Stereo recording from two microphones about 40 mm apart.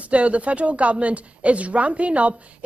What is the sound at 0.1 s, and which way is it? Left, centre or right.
A woman's voice, right.